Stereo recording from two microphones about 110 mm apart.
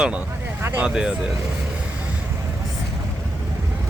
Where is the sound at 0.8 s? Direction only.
10° right (ahead or behind).